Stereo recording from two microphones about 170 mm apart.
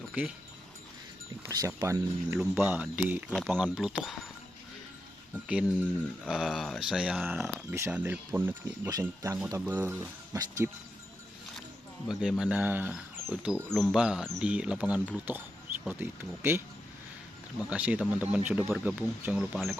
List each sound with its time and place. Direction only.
0.1 s speech: 5° right (ahead or behind)
1.5 s speech: 20° right (ahead or behind)
5.3 s speech: 5° right (ahead or behind)
12.0 s speech: 5° right (ahead or behind)
17.7 s speech: 5° right (ahead or behind)